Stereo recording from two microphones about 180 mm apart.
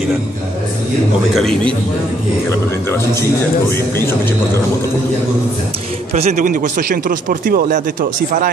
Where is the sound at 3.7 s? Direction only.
15° left (ahead or behind).